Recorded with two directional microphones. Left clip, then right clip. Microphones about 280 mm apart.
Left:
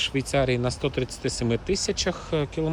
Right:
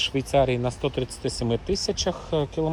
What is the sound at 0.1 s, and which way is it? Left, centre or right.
Speech, centre.